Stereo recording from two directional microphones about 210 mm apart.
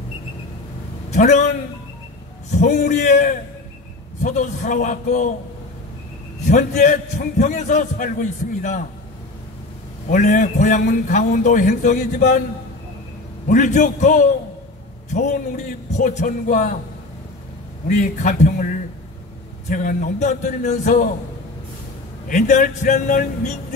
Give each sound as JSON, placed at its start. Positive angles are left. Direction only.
{"t": 1.1, "sound": "a man's voice", "side_deg": 35}
{"t": 2.6, "sound": "a man's voice", "side_deg": 35}
{"t": 6.5, "sound": "a man's voice", "side_deg": 35}
{"t": 10.0, "sound": "a man's voice", "side_deg": 40}
{"t": 13.5, "sound": "a man's voice", "side_deg": 35}
{"t": 17.8, "sound": "a man's voice", "side_deg": 35}
{"t": 19.7, "sound": "a man's voice", "side_deg": 35}
{"t": 22.3, "sound": "a man's voice", "side_deg": 40}